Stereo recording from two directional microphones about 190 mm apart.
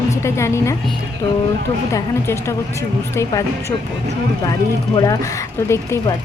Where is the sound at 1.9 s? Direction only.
15° left (ahead or behind).